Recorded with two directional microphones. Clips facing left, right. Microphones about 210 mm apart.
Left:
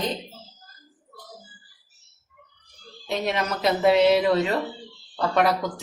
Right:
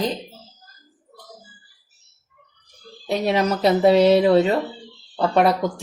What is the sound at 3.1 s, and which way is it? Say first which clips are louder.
Speech: right 6 dB; 35° right (ahead or behind).